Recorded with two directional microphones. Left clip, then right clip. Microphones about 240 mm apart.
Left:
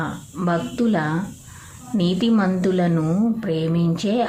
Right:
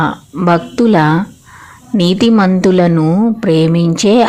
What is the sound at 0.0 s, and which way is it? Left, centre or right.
A woman's voice, right.